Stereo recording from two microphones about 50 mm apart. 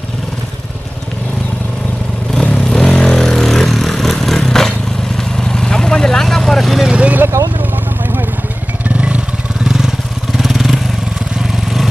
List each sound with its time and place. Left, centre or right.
2.3 s vehicle: centre
6.9 s a sound: right
8.8 s vehicle: right
9.7 s vehicle: centre